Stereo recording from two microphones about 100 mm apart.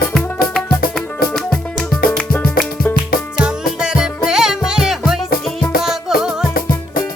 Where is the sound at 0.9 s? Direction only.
5° left (ahead or behind).